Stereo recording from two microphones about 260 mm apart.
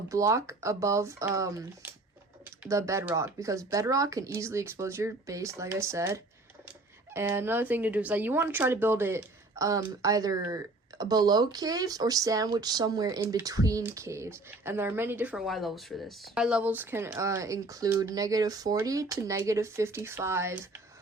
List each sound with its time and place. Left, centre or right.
0.1 s speech: centre